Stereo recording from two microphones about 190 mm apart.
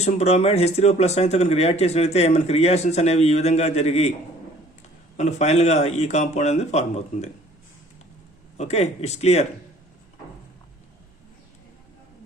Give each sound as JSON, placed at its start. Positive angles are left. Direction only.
{"t": 0.0, "sound": "speech", "side_deg": 35}
{"t": 5.1, "sound": "speech", "side_deg": 35}
{"t": 8.5, "sound": "speech", "side_deg": 35}